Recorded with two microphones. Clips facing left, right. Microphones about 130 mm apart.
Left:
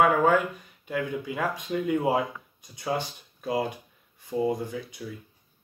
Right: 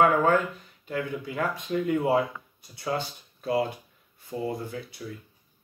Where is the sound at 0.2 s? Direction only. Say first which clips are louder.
Left 1 dB; 10° left (ahead or behind).